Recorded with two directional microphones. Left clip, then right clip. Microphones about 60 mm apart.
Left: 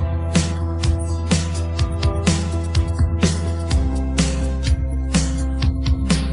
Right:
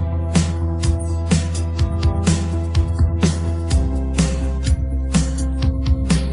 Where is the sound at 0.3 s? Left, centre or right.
Left.